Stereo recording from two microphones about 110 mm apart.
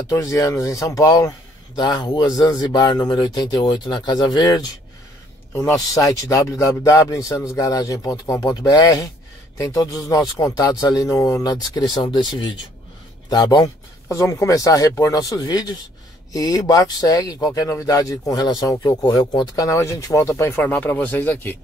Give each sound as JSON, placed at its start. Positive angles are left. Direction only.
{"t": 0.1, "sound": "speech", "side_deg": 30}
{"t": 5.9, "sound": "speech", "side_deg": 30}
{"t": 14.0, "sound": "speech", "side_deg": 30}